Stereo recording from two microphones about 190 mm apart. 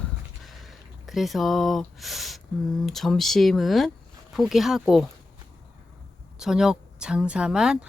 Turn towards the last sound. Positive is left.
turn(degrees=-5)  # may be behind; listen again after turning